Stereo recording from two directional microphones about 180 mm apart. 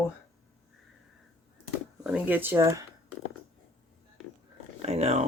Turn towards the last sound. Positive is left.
turn(degrees=-35)  # may be behind; listen again after turning